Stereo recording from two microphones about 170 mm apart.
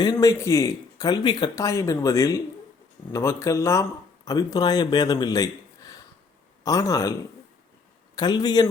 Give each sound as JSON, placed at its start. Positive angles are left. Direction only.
{"t": 0.0, "sound": "speech", "side_deg": 20}
{"t": 8.1, "sound": "speech", "side_deg": 25}